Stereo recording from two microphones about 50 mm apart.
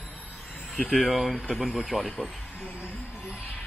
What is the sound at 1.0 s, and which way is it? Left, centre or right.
Speech, centre.